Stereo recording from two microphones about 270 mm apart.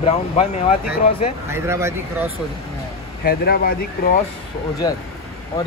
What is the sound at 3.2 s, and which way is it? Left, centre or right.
Speech, left.